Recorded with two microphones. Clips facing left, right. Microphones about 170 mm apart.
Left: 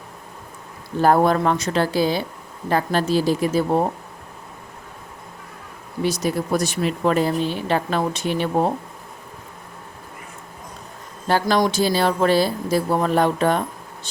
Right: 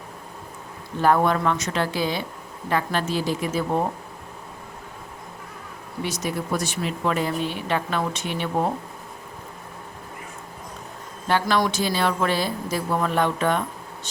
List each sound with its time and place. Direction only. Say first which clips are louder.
1.0 s speech: left 3 dB; 40° left (ahead or behind)
6.0 s speech: left 6 dB; 35° left (ahead or behind)
11.3 s speech: left 3 dB; 40° left (ahead or behind)